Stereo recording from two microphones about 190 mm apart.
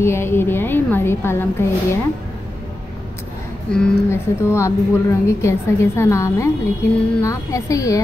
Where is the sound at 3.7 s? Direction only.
10° left (ahead or behind).